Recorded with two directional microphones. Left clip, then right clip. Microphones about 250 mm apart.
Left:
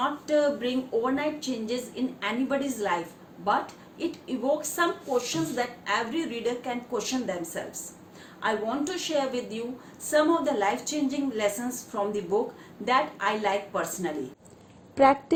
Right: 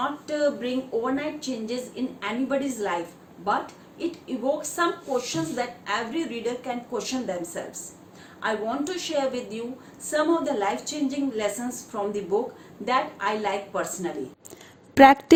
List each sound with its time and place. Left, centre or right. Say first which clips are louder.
0.0 s a woman's voice: left 1 dB; centre
14.9 s a woman's voice: right 6 dB; right